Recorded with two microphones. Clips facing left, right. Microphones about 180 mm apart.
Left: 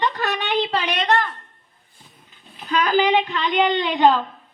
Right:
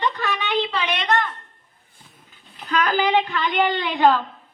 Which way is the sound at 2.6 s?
10° left (ahead or behind).